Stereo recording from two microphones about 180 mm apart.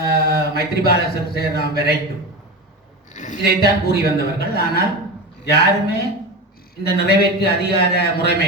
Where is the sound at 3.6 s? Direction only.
60° left (ahead or behind).